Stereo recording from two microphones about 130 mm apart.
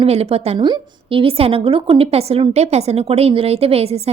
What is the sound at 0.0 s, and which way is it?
Speech, 50° right (ahead or behind).